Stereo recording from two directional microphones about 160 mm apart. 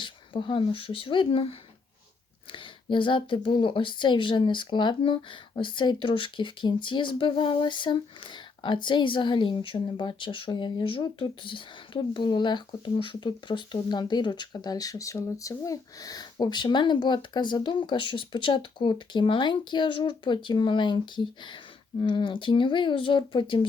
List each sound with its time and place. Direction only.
0.0 s a woman's voice: 30° left (ahead or behind)